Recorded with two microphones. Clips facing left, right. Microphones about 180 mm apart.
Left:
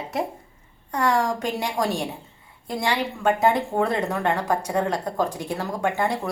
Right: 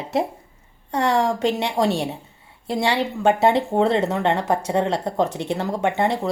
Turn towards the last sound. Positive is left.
turn(degrees=-20)  # may be behind; listen again after turning